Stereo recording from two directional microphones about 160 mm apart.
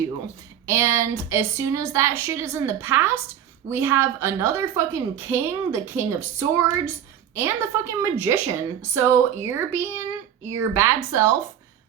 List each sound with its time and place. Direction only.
0.6 s a woman's voice: 15° right (ahead or behind)